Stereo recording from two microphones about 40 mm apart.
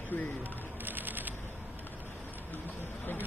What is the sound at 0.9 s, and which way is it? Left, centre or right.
Shuffling cards, right.